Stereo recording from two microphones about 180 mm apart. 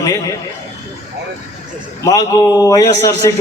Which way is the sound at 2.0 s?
20° left (ahead or behind).